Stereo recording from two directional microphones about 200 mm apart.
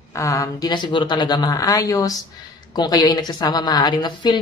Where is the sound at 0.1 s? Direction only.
15° left (ahead or behind).